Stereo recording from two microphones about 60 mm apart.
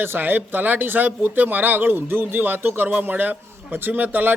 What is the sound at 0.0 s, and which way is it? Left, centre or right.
Speech, right.